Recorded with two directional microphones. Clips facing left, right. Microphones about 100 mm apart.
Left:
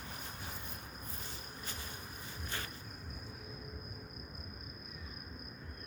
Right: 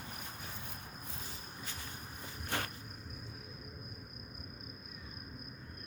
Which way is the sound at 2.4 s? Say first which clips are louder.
Right 6 dB; 65° right (ahead or behind).